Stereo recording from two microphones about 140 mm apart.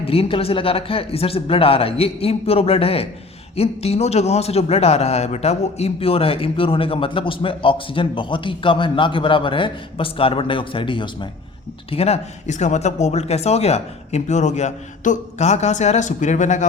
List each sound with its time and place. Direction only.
0.0 s speech: 45° left (ahead or behind)
11.9 s speech: 50° left (ahead or behind)